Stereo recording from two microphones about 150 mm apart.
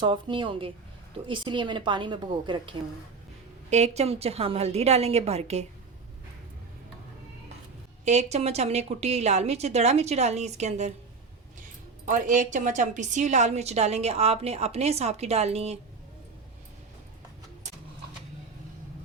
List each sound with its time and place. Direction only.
0.0 s a woman's voice: 35° right (ahead or behind)
3.7 s a woman's voice: 50° right (ahead or behind)
8.0 s a woman's voice: 50° right (ahead or behind)
12.0 s a woman's voice: 60° right (ahead or behind); by 15.8 s 45° right (ahead or behind)